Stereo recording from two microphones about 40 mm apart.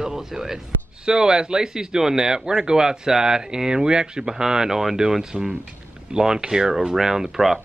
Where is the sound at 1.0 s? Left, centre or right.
Centre.